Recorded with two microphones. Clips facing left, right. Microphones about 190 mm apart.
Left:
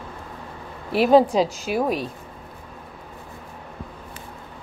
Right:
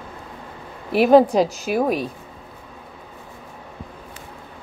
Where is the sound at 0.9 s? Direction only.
50° right (ahead or behind).